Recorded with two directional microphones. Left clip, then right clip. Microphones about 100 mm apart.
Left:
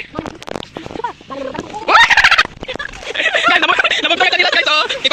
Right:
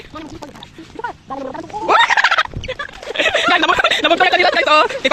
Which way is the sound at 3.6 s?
45° right (ahead or behind).